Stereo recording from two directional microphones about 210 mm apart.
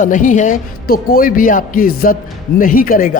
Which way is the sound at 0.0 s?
40° left (ahead or behind).